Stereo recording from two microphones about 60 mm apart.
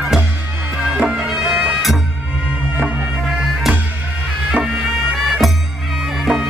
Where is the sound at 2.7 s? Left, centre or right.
Right.